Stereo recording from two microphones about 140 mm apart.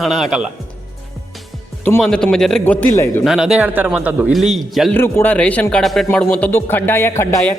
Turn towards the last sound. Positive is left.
turn(degrees=20)  # may be behind; listen again after turning